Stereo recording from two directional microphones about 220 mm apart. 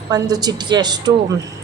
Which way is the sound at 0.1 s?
15° right (ahead or behind).